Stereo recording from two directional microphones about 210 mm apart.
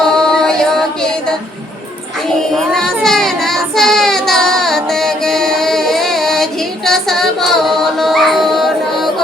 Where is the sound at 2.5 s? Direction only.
Centre (ahead or behind).